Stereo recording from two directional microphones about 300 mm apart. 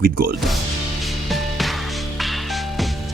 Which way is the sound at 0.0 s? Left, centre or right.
Right.